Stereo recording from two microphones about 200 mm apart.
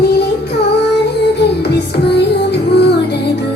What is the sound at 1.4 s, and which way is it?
Music, 55° left (ahead or behind).